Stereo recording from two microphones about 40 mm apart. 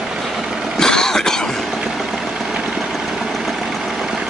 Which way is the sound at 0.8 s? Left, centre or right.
Centre.